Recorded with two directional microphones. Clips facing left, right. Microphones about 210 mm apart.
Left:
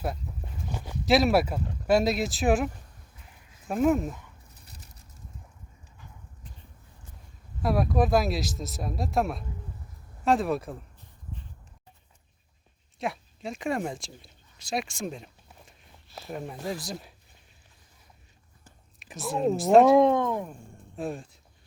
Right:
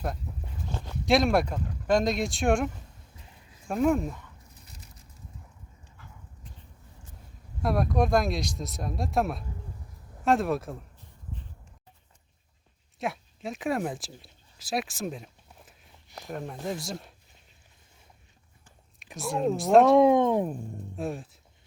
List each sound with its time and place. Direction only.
0.7 s speech: 10° left (ahead or behind)
3.7 s speech: centre (ahead or behind)
7.6 s speech: centre (ahead or behind)
13.0 s a sound: centre (ahead or behind)
16.0 s a sound: 15° right (ahead or behind)
16.3 s speech: centre (ahead or behind)
18.9 s speech: centre (ahead or behind)
20.1 s a sound: 20° right (ahead or behind)
20.3 s speech: 35° right (ahead or behind)
20.9 s speech: centre (ahead or behind)